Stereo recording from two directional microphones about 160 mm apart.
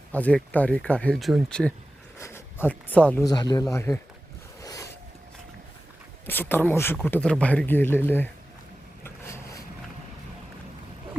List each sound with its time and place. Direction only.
0.1 s speech: 10° left (ahead or behind)
2.1 s speech: 15° left (ahead or behind)
3.2 s speech: 25° left (ahead or behind)
4.6 s a sound: 20° left (ahead or behind)
6.2 s speech: 15° left (ahead or behind)
9.0 s vehicle: 15° left (ahead or behind)